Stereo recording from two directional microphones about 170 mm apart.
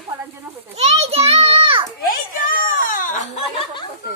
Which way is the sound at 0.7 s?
40° right (ahead or behind).